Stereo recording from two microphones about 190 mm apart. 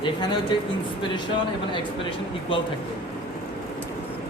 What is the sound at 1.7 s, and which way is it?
Speech, 25° left (ahead or behind).